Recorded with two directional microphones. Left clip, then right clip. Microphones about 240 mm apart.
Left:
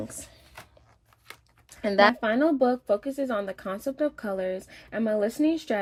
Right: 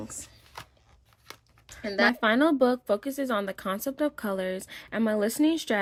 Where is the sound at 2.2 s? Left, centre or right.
Right.